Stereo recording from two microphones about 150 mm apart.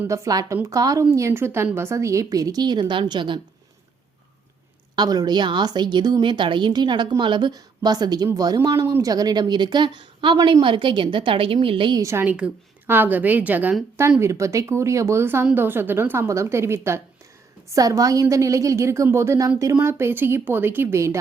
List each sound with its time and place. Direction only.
0.0 s a woman's voice: 20° right (ahead or behind)
4.9 s a woman's voice: 25° right (ahead or behind)
12.0 s a woman's voice: 15° right (ahead or behind)